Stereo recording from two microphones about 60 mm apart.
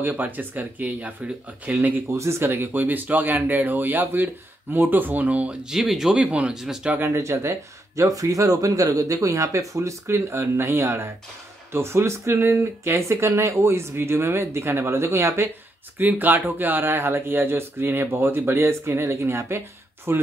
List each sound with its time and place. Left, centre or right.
0.0 s speech: right
2.1 s speech: right
2.5 s speech: right; by 6.9 s centre
7.1 s speech: right
16.0 s speech: right